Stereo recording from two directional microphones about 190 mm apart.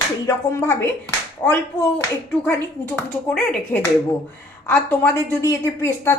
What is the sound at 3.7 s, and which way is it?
Speech, 10° left (ahead or behind).